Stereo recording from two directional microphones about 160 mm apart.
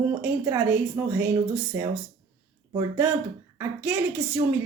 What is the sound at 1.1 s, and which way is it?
Speech, 10° right (ahead or behind).